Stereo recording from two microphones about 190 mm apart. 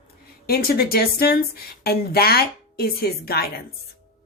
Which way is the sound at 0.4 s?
55° left (ahead or behind).